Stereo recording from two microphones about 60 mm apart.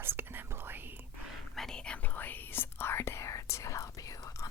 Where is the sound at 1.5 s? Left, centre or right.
Centre.